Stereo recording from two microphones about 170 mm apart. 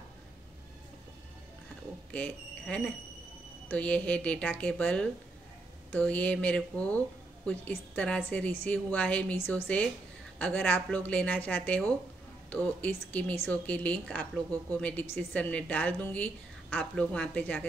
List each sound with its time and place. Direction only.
2.1 s a woman's voice: 5° left (ahead or behind)